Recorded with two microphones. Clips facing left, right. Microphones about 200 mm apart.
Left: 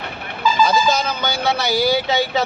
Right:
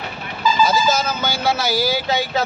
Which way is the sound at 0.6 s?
5° right (ahead or behind).